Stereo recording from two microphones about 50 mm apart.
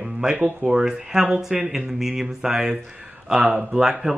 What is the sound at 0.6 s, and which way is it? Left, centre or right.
Speech, centre.